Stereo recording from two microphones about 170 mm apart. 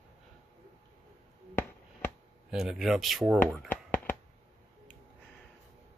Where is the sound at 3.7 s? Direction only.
10° left (ahead or behind).